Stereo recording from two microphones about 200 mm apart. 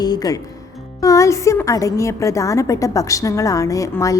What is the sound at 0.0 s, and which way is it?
A woman's voice, 20° left (ahead or behind).